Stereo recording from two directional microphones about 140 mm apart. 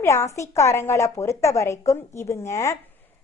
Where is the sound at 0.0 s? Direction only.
20° left (ahead or behind).